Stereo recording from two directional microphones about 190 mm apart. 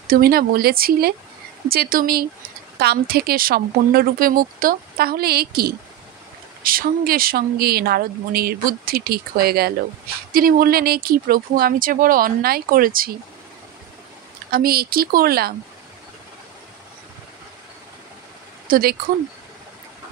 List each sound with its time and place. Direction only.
0.1 s speech: 50° right (ahead or behind)
14.5 s speech: 50° right (ahead or behind)
18.7 s speech: 55° right (ahead or behind)